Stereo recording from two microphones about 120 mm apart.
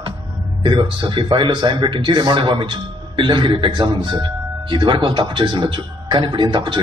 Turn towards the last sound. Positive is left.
turn(degrees=-40)  # may be behind; listen again after turning